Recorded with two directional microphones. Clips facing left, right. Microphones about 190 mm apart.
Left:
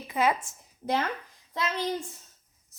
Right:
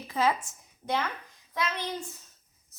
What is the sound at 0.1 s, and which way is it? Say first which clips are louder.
Speech: left 1 dB; 15° left (ahead or behind).